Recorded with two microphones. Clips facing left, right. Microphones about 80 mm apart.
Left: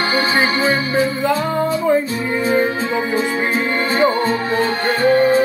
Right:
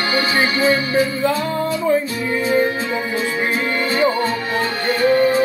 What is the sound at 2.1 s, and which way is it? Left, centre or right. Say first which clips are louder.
Music: left 1 dB; left.